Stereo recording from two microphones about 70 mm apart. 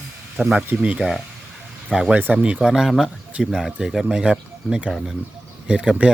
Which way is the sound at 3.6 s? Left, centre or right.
Centre.